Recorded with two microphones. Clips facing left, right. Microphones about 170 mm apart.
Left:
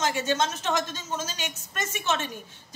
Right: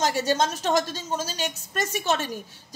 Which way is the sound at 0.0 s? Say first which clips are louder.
Right 3 dB; 35° right (ahead or behind).